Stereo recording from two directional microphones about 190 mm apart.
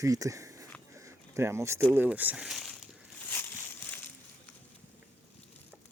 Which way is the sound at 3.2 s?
10° left (ahead or behind).